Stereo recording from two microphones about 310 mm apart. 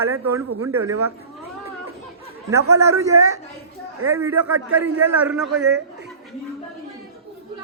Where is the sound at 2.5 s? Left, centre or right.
Centre.